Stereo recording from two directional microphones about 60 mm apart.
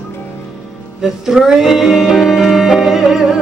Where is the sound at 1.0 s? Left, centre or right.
Centre.